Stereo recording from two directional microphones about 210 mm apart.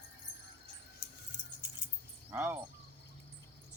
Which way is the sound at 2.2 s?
10° right (ahead or behind).